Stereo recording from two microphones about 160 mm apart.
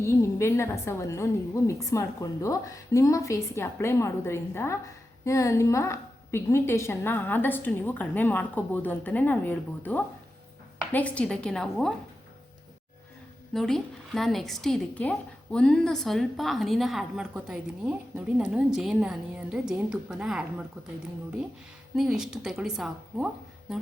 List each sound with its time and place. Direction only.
0.0 s a woman's voice: 15° left (ahead or behind)
13.5 s a woman's voice: 5° left (ahead or behind)
21.9 s a woman's voice: 5° right (ahead or behind)